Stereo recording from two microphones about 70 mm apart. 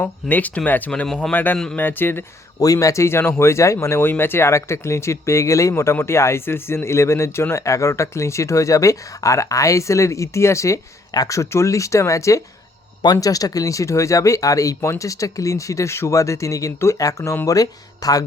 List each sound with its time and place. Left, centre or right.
0.0 s speech: left
1.0 s speech: centre
1.3 s speech: left
2.6 s speech: left
11.1 s speech: left
11.3 s speech: left